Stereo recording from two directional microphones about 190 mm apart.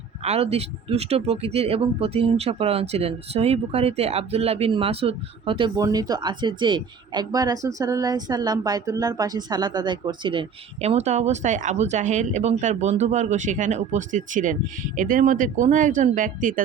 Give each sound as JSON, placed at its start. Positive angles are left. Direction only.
{"t": 0.3, "sound": "speech", "side_deg": -35}